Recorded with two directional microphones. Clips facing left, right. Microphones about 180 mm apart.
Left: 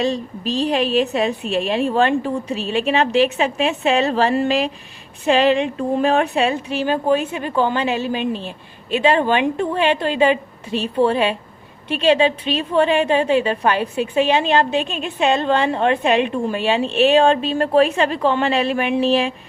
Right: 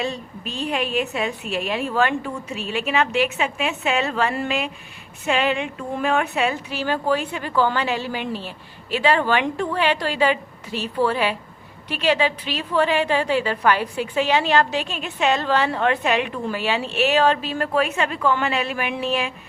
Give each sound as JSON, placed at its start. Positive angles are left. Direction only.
{"t": 0.0, "sound": "a woman's voice", "side_deg": 30}